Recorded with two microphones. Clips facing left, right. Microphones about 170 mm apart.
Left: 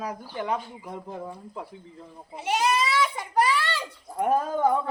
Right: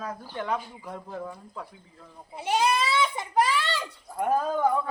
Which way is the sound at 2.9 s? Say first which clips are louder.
Even; 25° right (ahead or behind).